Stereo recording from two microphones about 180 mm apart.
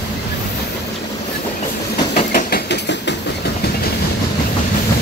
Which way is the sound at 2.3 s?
60° left (ahead or behind).